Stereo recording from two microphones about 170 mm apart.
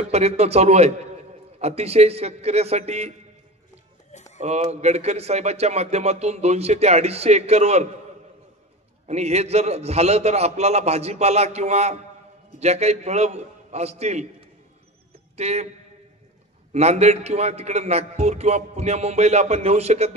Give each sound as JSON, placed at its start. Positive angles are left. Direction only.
{"t": 0.1, "sound": "speech", "side_deg": -40}
{"t": 4.1, "sound": "music", "side_deg": 45}
{"t": 4.4, "sound": "speech", "side_deg": -40}
{"t": 9.0, "sound": "speech", "side_deg": -40}
{"t": 15.3, "sound": "a man's voice", "side_deg": -40}
{"t": 16.7, "sound": "speech", "side_deg": -40}